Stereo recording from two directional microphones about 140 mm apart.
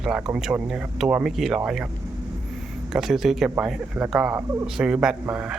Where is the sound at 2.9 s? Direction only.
5° right (ahead or behind).